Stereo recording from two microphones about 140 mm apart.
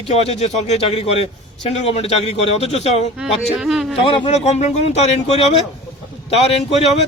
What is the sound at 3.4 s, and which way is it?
Speech, 5° right (ahead or behind).